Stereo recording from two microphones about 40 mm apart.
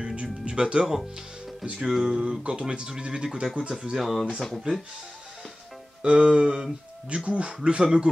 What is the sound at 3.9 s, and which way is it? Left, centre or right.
Music, centre.